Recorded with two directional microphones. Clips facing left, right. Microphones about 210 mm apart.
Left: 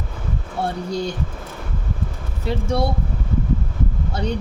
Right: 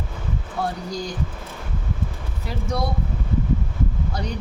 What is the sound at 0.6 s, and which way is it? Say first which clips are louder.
Speech: left 4 dB; 25° left (ahead or behind).